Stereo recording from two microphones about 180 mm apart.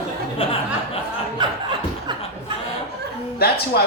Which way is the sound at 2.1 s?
25° right (ahead or behind).